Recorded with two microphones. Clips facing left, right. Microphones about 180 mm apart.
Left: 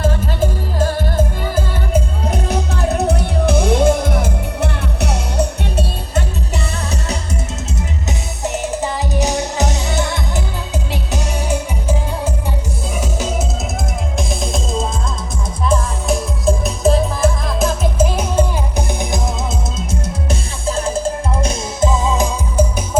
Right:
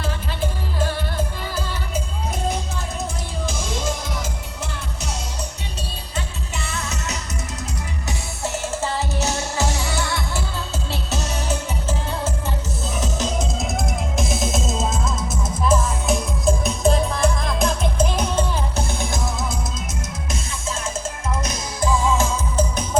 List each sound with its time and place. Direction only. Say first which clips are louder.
0.0 s music: left 8 dB; 40° left (ahead or behind); by 6.2 s 60° left (ahead or behind)
8.4 s music: left 4 dB; 15° left (ahead or behind)
14.2 s music: left 1 dB; centre (ahead or behind); by 19.2 s 15° left (ahead or behind)
20.7 s music: left 10 dB; 35° left (ahead or behind); by 22.6 s 15° left (ahead or behind)